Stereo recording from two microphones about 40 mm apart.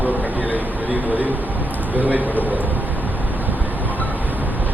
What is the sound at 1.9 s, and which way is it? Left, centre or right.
Speech, right.